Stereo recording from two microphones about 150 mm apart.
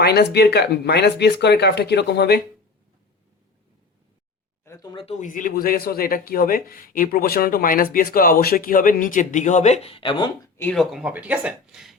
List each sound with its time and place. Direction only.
0.0 s speech: 90° left
4.6 s speech: 20° left (ahead or behind)
5.2 s a man's voice: 60° left (ahead or behind); by 10.5 s 30° left (ahead or behind)
10.6 s speech: 10° left (ahead or behind)
10.9 s speech: 10° right (ahead or behind)